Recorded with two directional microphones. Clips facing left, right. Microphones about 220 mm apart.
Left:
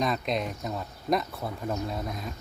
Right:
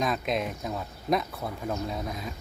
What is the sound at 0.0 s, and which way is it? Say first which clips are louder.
Speech: even; centre (ahead or behind).